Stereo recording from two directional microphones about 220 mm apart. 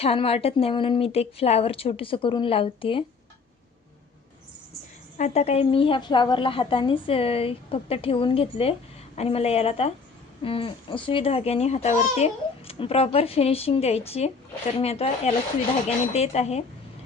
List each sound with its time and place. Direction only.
0.0 s a child's voice: 25° left (ahead or behind)
5.1 s a child's voice: 30° left (ahead or behind)